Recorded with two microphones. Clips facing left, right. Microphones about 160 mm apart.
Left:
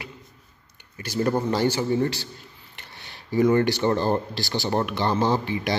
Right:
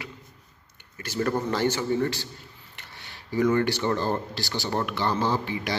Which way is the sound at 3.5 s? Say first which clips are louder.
Left 3 dB; 20° left (ahead or behind).